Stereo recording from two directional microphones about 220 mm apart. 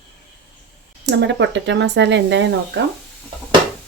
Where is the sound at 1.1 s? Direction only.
55° right (ahead or behind).